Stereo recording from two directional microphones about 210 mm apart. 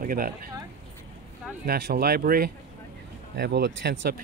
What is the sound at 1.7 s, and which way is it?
Speech, 50° right (ahead or behind).